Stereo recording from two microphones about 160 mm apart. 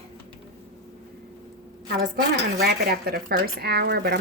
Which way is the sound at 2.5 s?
70° right (ahead or behind).